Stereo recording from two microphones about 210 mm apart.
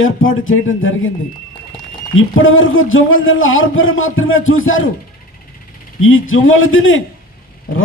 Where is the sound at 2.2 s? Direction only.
70° left (ahead or behind).